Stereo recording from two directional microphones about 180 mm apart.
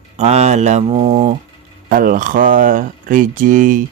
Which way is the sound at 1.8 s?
50° right (ahead or behind).